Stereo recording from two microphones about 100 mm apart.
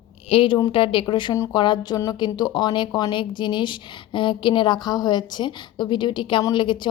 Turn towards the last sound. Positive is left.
turn(degrees=55)  # may be behind; listen again after turning